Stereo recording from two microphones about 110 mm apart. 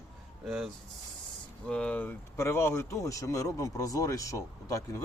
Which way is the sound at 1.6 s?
10° left (ahead or behind).